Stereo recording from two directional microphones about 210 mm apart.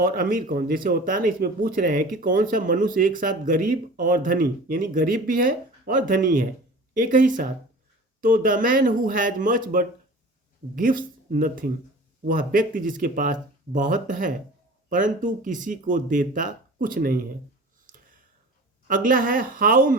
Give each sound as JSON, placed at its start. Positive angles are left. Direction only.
{"t": 0.0, "sound": "speech", "side_deg": -45}
{"t": 17.8, "sound": "a sound", "side_deg": -40}
{"t": 18.9, "sound": "speech", "side_deg": -40}